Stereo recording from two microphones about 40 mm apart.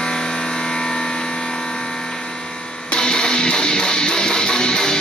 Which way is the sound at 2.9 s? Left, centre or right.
Centre.